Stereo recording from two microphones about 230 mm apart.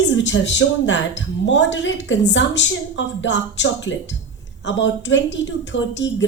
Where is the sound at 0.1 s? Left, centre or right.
Left.